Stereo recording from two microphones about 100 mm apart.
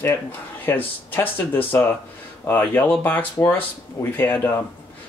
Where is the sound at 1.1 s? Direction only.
20° left (ahead or behind).